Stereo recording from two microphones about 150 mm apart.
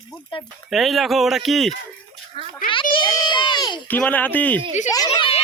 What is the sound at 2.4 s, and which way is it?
Speech, 40° right (ahead or behind).